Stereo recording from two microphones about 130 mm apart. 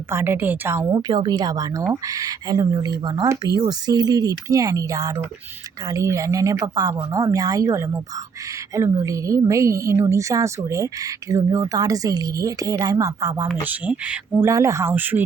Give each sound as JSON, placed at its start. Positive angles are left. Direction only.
{"t": 0.1, "sound": "speech", "side_deg": -15}
{"t": 13.7, "sound": "speech", "side_deg": -10}